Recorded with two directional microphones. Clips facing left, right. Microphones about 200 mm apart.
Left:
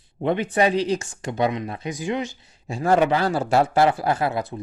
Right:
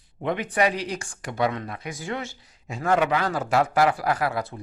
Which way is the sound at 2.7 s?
30° left (ahead or behind).